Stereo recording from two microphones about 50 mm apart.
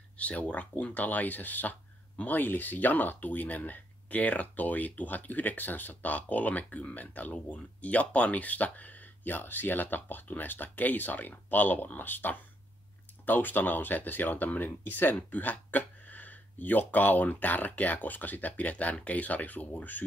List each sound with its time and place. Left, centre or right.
0.2 s speech: left